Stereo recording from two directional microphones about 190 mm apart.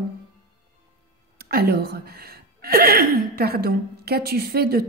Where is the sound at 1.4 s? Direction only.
55° right (ahead or behind).